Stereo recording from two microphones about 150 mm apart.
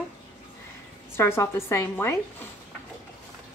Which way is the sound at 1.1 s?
15° left (ahead or behind).